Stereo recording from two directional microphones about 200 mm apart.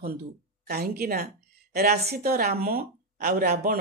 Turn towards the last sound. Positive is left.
turn(degrees=-50)  # may be behind; listen again after turning